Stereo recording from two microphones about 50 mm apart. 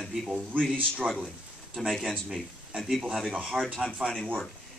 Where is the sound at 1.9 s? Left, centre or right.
Centre.